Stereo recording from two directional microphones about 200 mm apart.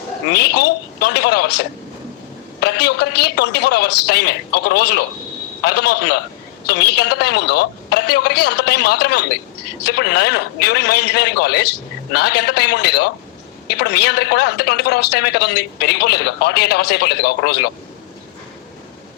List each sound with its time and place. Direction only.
0.3 s a man's voice: 55° left (ahead or behind)
2.6 s a man's voice: 55° left (ahead or behind)